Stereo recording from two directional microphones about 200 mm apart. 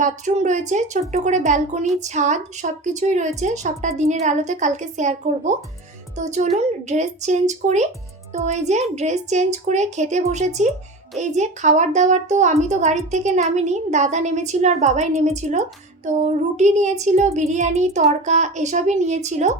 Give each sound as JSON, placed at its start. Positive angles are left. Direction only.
{"t": 0.0, "sound": "a woman's voice", "side_deg": -35}